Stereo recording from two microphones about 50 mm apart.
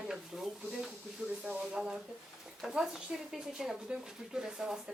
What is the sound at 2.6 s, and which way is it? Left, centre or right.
Speech, centre.